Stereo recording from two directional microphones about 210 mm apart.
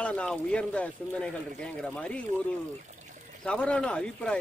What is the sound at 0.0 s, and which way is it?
Speech, 5° left (ahead or behind).